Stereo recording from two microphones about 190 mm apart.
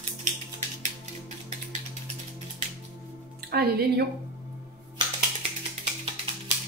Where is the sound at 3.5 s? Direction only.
55° right (ahead or behind).